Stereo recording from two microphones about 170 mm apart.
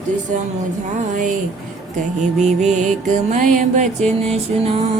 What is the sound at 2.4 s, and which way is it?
Music, 45° right (ahead or behind).